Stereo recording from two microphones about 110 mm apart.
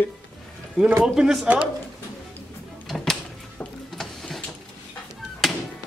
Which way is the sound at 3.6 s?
5° left (ahead or behind).